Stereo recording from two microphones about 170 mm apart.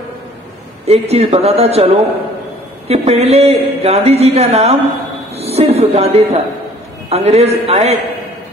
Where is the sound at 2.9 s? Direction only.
35° right (ahead or behind).